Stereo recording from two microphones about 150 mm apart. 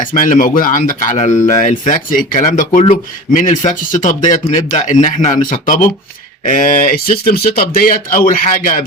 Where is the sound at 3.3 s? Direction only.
55° left (ahead or behind).